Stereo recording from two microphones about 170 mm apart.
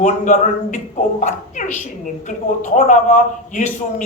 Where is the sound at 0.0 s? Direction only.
45° left (ahead or behind).